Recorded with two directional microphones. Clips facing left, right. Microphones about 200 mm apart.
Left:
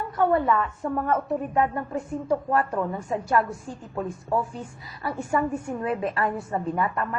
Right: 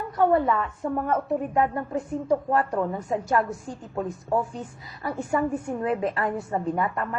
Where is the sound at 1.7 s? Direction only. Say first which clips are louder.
Right 1 dB; 25° right (ahead or behind).